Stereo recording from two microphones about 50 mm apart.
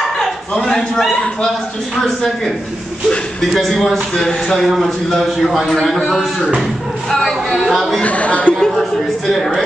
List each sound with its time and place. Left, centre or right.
0.2 s a sound: centre
3.5 s a man's voice: centre
8.0 s speech: left
8.5 s a man's voice: centre